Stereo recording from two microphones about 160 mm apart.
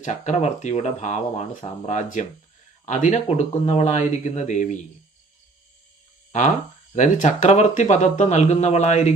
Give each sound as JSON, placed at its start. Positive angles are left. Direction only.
{"t": 0.0, "sound": "speech", "side_deg": 50}
{"t": 6.9, "sound": "speech", "side_deg": 50}